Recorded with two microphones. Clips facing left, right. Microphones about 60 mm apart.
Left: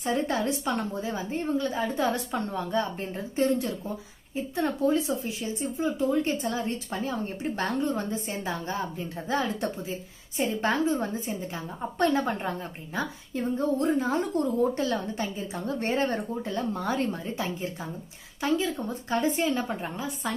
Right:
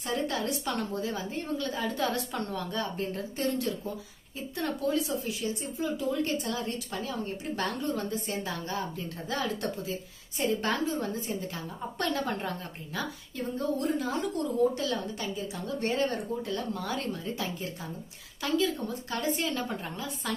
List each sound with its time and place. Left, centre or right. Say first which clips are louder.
0.0 s speech: left 4 dB; left